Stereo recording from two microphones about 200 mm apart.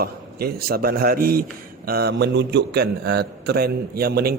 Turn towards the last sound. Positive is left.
turn(degrees=-50)  # may be behind; listen again after turning